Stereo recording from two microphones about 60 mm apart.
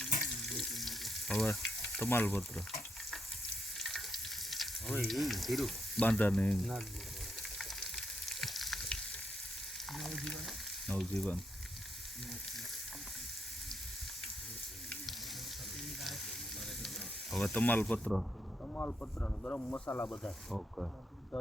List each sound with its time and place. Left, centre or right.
0.0 s frying: centre
2.0 s speech: left
3.1 s frying: centre
4.9 s speech: centre
6.0 s speech: left
7.6 s frying: centre
17.4 s speech: left
19.7 s speech: left
20.5 s speech: centre